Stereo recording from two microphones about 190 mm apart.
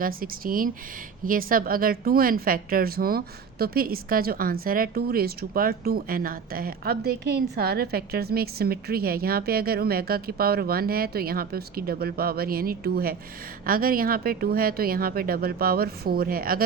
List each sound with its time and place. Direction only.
0.0 s speech: 50° right (ahead or behind)